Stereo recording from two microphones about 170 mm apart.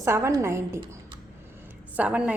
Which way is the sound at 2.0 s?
5° right (ahead or behind).